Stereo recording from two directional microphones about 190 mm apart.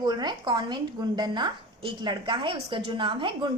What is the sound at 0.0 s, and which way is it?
A woman's voice, 20° right (ahead or behind).